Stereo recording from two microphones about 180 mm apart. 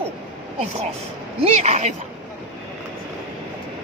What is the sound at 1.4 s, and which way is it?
Speech, 40° right (ahead or behind).